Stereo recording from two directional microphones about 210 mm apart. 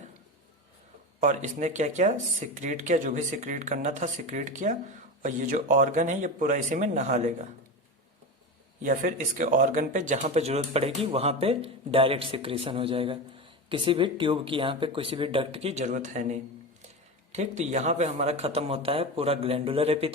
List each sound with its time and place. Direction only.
1.2 s speech: 35° right (ahead or behind)
8.8 s speech: 40° right (ahead or behind)